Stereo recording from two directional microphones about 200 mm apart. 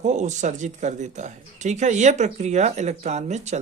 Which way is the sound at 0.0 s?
35° right (ahead or behind).